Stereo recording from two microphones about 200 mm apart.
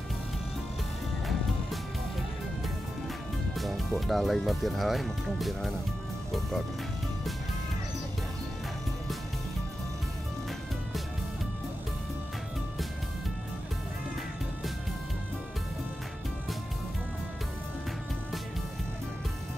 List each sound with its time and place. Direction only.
3.5 s speech: centre (ahead or behind)